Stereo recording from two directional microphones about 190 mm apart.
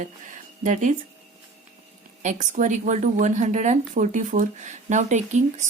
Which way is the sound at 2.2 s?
40° right (ahead or behind).